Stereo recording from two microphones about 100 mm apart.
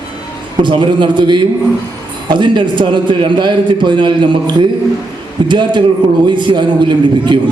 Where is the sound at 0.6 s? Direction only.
50° right (ahead or behind).